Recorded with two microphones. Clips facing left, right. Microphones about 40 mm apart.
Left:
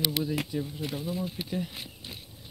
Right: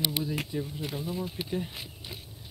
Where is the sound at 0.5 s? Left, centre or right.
Centre.